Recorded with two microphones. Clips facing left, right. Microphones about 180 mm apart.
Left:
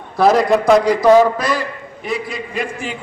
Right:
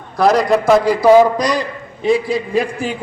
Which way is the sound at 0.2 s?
Centre (ahead or behind).